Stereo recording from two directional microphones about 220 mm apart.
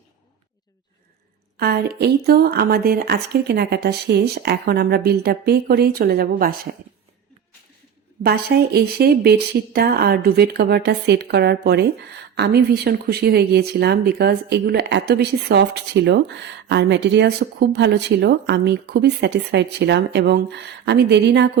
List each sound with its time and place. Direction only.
1.5 s a woman's voice: 45° right (ahead or behind)
8.2 s speech: 45° right (ahead or behind)